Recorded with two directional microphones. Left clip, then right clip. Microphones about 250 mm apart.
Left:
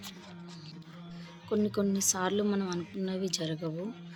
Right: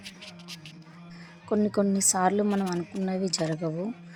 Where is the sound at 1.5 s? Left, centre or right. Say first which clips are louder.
Right 5 dB; right.